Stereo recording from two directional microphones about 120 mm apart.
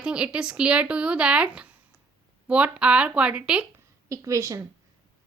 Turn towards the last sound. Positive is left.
turn(degrees=-25)  # may be behind; listen again after turning